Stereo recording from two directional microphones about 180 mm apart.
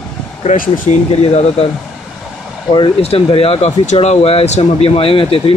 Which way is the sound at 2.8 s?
30° left (ahead or behind).